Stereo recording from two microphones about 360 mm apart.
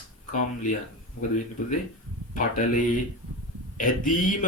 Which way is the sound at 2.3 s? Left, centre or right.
Left.